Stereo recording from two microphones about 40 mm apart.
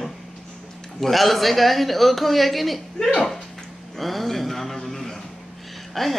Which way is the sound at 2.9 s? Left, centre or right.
Centre.